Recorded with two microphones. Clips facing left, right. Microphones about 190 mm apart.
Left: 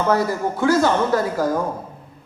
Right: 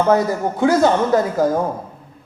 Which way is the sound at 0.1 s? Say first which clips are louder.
Right 3 dB; 20° right (ahead or behind).